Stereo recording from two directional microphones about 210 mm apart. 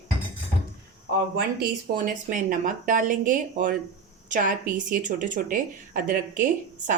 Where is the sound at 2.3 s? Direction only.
40° right (ahead or behind).